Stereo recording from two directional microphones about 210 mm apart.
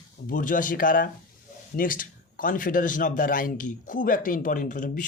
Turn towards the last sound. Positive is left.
turn(degrees=40)  # may be behind; listen again after turning